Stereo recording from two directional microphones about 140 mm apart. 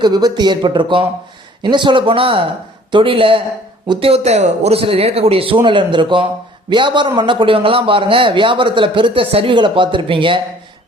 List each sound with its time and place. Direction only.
0.0 s a man's voice: 30° right (ahead or behind)